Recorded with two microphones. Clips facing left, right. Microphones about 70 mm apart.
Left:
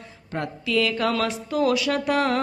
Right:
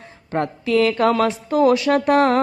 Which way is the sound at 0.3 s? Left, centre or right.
Right.